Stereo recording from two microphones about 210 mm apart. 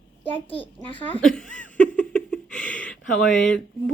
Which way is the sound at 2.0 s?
5° left (ahead or behind).